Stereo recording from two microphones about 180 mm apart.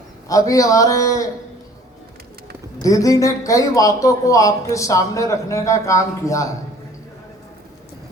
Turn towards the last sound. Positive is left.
turn(degrees=15)  # may be behind; listen again after turning